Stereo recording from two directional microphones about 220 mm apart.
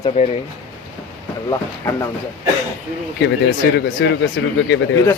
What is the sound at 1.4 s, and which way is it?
Speech, 15° left (ahead or behind).